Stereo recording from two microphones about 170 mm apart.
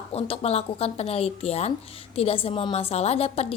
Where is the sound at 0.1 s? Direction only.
35° left (ahead or behind).